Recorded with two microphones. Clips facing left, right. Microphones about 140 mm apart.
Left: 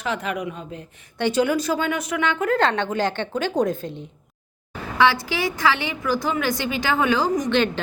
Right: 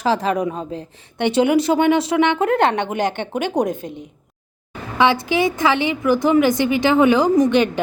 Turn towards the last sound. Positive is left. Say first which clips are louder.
# right 6 dB
turn(degrees=-15)  # may be behind; listen again after turning